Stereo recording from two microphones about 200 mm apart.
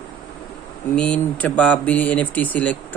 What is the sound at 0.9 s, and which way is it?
A man's voice, 5° left (ahead or behind).